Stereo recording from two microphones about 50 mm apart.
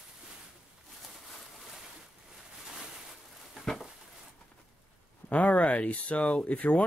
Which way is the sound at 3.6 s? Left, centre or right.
Centre.